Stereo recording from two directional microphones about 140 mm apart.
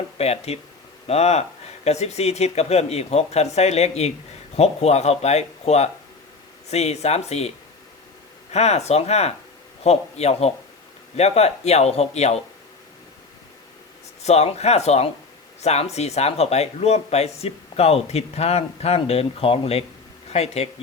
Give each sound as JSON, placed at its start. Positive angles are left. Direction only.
{"t": 0.2, "sound": "speech", "side_deg": 50}
{"t": 8.5, "sound": "speech", "side_deg": 50}
{"t": 14.2, "sound": "speech", "side_deg": 50}